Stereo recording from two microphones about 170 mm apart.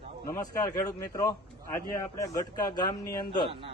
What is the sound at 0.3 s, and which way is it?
A man's voice, 20° left (ahead or behind).